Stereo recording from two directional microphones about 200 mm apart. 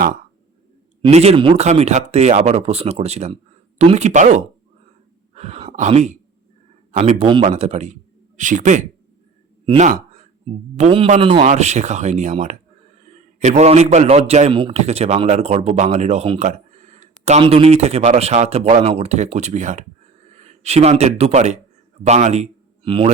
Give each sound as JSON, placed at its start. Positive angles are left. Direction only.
{"t": 1.0, "sound": "a man's voice", "side_deg": -30}